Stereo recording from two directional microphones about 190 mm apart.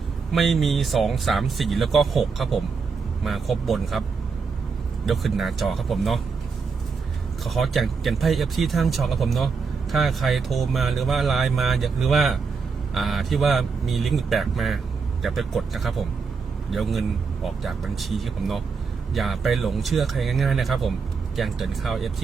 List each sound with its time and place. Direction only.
0.3 s speech: centre (ahead or behind)
5.0 s speech: centre (ahead or behind)
7.4 s speech: centre (ahead or behind)